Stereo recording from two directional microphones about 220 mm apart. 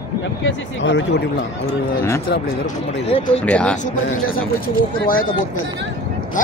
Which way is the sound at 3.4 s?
5° left (ahead or behind).